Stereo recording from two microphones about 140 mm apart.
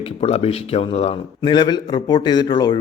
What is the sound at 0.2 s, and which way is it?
Speech, 45° left (ahead or behind).